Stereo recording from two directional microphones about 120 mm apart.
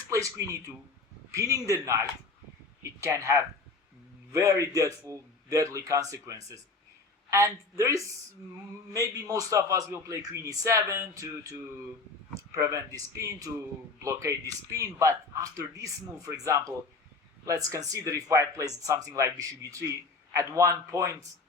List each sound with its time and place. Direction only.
0.1 s speech: 25° right (ahead or behind)